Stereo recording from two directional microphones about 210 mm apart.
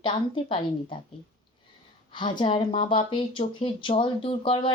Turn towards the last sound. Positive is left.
turn(degrees=25)  # may be behind; listen again after turning